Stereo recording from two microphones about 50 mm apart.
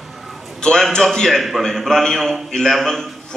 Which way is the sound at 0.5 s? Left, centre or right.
Centre.